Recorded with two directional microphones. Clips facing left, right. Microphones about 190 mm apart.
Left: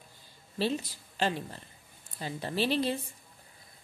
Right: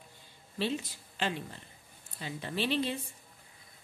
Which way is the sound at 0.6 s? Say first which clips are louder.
Left 3 dB; 40° left (ahead or behind).